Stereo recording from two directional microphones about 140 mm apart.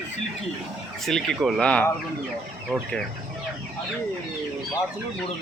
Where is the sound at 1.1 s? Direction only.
5° left (ahead or behind).